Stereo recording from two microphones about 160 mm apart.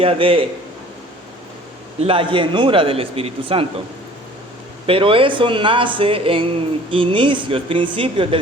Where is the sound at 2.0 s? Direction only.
35° right (ahead or behind).